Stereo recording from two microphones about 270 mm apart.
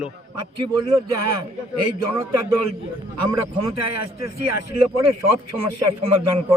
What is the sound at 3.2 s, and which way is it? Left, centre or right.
Speech, right.